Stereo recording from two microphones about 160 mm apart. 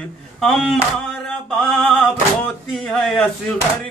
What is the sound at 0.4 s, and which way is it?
Speech, centre (ahead or behind).